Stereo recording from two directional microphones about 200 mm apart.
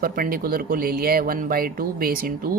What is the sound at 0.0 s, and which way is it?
Speech, 45° right (ahead or behind).